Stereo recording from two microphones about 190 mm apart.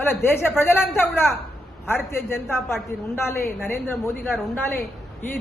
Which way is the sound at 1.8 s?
10° left (ahead or behind).